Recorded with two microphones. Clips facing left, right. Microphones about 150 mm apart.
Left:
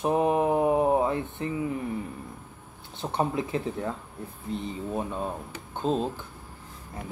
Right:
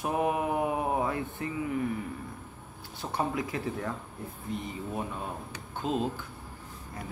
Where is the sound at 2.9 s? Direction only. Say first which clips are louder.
Left 4 dB; 25° left (ahead or behind).